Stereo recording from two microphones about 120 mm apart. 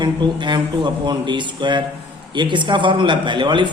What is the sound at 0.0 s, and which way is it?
A man's voice, 40° right (ahead or behind).